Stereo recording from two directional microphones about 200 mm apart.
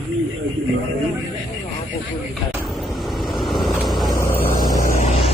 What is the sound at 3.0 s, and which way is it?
Vehicle, centre (ahead or behind).